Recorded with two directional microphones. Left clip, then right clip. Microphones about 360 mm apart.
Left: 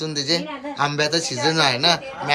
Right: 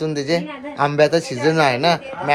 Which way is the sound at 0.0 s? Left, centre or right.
Centre.